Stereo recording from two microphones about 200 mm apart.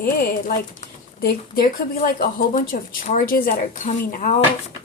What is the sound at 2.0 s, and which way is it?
Speech, 45° left (ahead or behind).